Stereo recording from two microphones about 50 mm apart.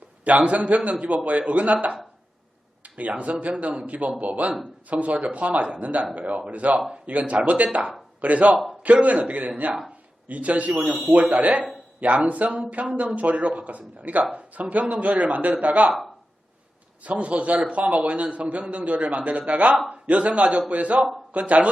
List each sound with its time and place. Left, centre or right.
0.3 s a man's voice: right
6.7 s speech: centre
7.0 s a man's voice: right
10.8 s speech: centre
11.0 s a man's voice: right
17.0 s a man's voice: right